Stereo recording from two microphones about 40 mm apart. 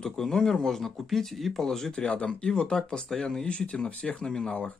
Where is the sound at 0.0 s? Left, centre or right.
Centre.